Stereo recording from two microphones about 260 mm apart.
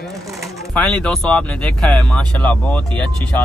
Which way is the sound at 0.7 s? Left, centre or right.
Centre.